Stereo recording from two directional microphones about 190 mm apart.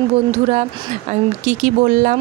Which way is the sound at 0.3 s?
35° right (ahead or behind).